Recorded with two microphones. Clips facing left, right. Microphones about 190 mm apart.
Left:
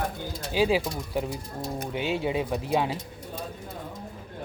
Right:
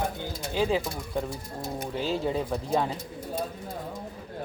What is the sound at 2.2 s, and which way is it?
Speech, 5° left (ahead or behind).